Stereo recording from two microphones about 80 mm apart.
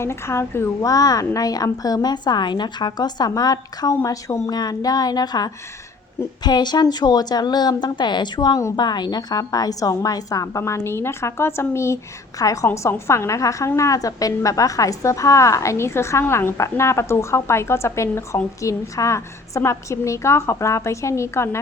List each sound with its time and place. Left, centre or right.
0.0 s a woman's voice: left
0.8 s a woman's voice: left
12.4 s a woman's voice: left
12.7 s a woman's voice: left